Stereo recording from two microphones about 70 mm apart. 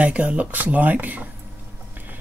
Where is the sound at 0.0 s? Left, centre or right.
Centre.